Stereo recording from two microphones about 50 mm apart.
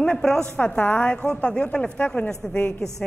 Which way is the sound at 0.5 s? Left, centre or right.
Left.